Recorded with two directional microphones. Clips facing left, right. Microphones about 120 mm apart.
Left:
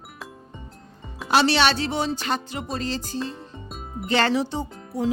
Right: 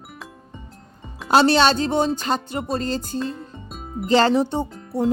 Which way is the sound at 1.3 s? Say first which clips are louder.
Right 4 dB; 45° right (ahead or behind).